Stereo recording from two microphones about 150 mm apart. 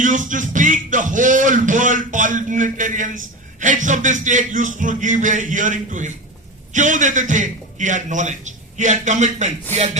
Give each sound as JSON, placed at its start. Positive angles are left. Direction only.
{"t": 0.0, "sound": "speech", "side_deg": -60}